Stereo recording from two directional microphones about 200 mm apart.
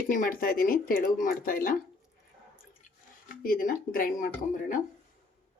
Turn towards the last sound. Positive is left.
turn(degrees=40)  # may be behind; listen again after turning